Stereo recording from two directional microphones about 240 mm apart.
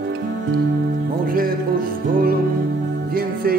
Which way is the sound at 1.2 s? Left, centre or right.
Right.